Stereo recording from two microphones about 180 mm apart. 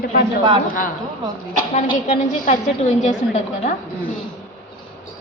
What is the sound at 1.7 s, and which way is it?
A woman's voice, 45° left (ahead or behind).